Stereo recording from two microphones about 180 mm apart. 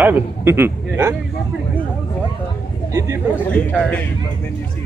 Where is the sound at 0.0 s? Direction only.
10° right (ahead or behind).